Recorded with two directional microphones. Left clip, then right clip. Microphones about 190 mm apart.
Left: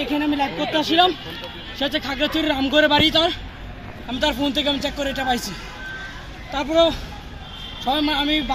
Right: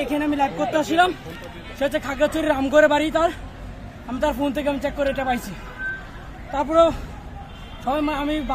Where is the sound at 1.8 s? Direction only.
10° right (ahead or behind).